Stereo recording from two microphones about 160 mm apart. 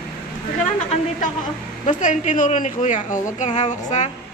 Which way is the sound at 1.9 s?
50° left (ahead or behind).